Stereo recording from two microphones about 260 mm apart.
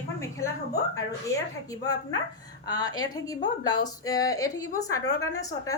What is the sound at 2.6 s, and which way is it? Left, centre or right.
A woman's voice, centre.